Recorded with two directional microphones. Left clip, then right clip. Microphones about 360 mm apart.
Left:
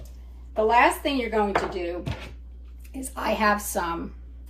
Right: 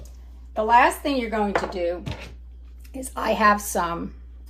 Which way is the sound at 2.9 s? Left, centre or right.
Centre.